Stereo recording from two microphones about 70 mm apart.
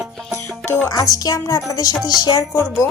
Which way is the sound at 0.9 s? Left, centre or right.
Left.